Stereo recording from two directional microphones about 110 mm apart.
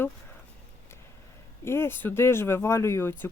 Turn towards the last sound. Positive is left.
turn(degrees=25)  # may be behind; listen again after turning